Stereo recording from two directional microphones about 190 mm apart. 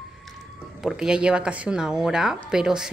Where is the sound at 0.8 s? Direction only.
5° right (ahead or behind).